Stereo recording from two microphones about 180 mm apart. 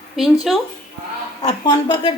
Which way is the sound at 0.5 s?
Centre (ahead or behind).